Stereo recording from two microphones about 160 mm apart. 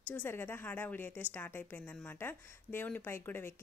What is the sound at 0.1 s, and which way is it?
A woman's voice, 10° left (ahead or behind).